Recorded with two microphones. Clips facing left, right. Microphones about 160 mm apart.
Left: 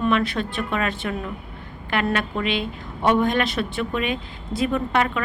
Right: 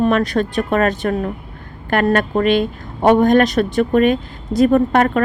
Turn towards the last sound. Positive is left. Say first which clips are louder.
# right 8 dB
turn(degrees=-45)  # may be behind; listen again after turning